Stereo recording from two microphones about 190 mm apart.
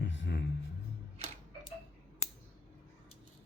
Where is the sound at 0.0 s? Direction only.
70° left (ahead or behind).